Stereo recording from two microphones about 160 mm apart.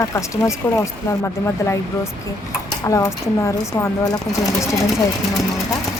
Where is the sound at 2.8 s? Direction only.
20° left (ahead or behind).